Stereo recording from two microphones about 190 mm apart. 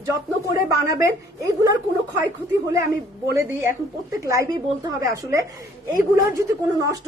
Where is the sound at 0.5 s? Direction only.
20° right (ahead or behind).